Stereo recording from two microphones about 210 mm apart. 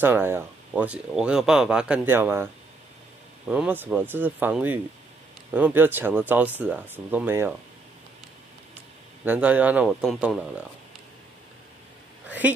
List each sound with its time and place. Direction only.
0.0 s speech: 10° right (ahead or behind)
9.2 s speech: 10° right (ahead or behind)
12.3 s speech: 10° right (ahead or behind)